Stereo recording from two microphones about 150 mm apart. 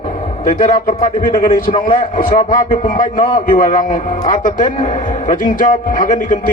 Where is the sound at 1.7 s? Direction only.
35° left (ahead or behind).